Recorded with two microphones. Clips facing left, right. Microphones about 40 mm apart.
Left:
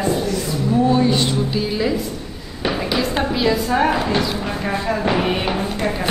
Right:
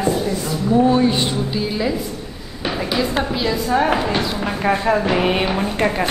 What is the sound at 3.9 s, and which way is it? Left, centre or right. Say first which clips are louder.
A woman's voice: even; centre.